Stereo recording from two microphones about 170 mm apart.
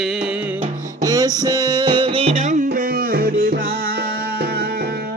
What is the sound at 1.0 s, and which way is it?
Music, 20° right (ahead or behind).